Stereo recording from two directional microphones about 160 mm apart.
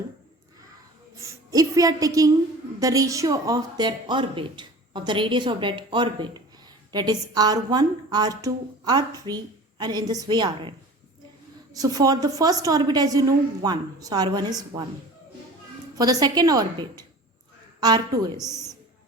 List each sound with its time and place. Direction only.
1.2 s a woman's voice: 20° right (ahead or behind)
16.0 s a woman's voice: 25° right (ahead or behind)